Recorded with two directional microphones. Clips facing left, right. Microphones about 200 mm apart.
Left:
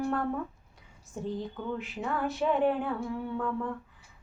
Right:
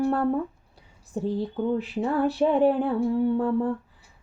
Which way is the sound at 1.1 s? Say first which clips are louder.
Right 8 dB; 35° right (ahead or behind).